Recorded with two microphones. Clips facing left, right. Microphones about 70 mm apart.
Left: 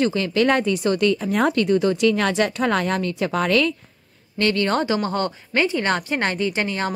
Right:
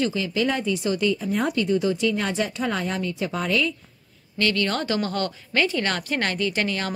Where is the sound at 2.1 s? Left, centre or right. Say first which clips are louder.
Left 5 dB; left.